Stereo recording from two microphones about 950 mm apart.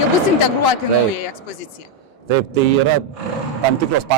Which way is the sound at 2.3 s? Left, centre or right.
Right.